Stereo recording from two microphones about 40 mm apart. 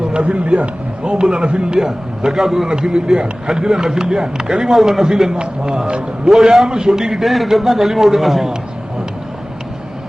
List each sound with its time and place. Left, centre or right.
0.1 s a man's voice: right; by 2.6 s centre
2.6 s a man's voice: right; by 5.0 s centre
5.0 s a man's voice: centre